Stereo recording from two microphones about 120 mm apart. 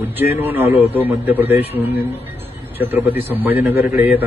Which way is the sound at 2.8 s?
20° right (ahead or behind).